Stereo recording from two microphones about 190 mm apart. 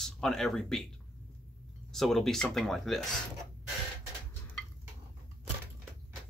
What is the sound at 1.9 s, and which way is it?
Speech, centre (ahead or behind).